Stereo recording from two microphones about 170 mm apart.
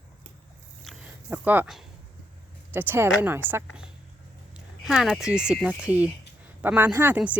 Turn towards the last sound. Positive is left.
turn(degrees=-10)  # may be behind; listen again after turning